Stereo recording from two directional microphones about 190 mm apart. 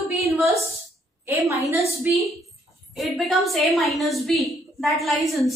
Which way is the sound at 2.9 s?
Centre (ahead or behind).